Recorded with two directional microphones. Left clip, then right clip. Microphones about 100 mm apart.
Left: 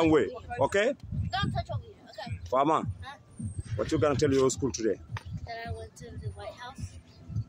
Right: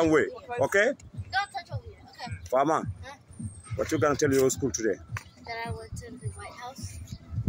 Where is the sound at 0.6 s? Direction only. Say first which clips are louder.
Right 2 dB; 5° left (ahead or behind).